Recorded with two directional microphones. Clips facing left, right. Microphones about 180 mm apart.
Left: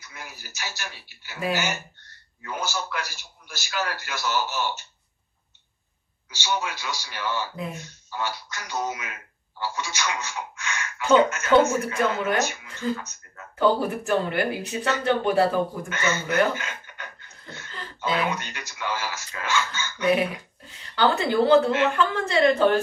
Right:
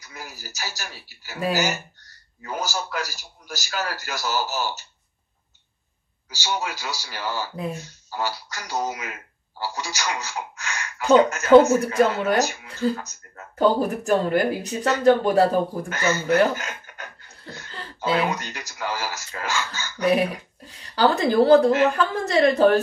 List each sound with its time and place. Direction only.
0.0 s speech: 40° right (ahead or behind)
6.3 s speech: 35° right (ahead or behind)